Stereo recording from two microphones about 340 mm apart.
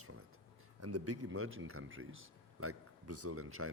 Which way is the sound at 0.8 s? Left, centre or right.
Right.